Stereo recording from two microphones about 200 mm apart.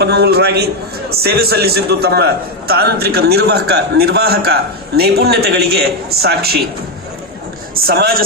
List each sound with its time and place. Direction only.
0.0 s a man's voice: 55° right (ahead or behind)
7.9 s a man's voice: 50° right (ahead or behind)